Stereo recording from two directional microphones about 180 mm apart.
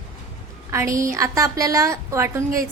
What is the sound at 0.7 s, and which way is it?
A woman's voice, 15° right (ahead or behind).